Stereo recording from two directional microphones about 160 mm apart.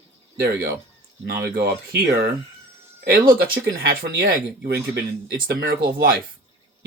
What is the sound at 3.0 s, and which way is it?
Speech, 70° right (ahead or behind).